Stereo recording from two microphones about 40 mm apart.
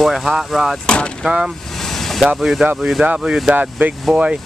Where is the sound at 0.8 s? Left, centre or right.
Left.